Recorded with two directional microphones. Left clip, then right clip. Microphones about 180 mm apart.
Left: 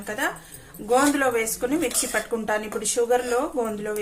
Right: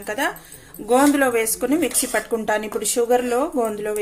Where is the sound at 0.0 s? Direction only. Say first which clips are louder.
Right 3 dB; 35° right (ahead or behind).